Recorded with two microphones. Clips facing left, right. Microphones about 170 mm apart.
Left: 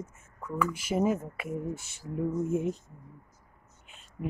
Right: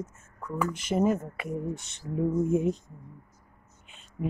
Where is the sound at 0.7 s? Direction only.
5° left (ahead or behind).